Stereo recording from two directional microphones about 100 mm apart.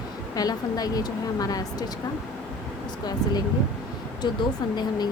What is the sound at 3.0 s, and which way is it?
A woman's voice, 40° left (ahead or behind).